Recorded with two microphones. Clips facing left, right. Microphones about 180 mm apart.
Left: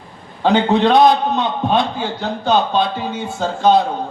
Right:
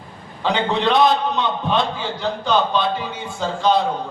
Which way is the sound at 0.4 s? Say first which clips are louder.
Left 6 dB; 50° left (ahead or behind).